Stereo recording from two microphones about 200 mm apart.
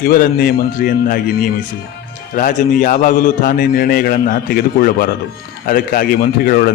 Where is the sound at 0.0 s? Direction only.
45° left (ahead or behind).